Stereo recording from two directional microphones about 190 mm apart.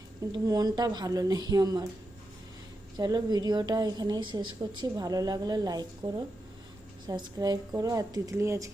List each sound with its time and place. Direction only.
0.3 s a woman's voice: 20° right (ahead or behind)
3.0 s a woman's voice: 20° right (ahead or behind)
7.3 s speech: 20° right (ahead or behind)